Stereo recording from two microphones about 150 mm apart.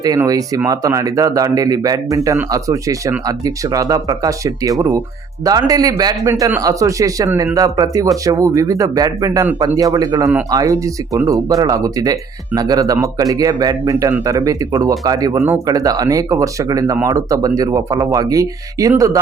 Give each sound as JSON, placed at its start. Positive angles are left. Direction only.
{"t": 0.0, "sound": "speech", "side_deg": -25}